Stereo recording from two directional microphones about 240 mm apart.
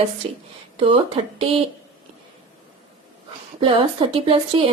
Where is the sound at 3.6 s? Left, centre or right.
Right.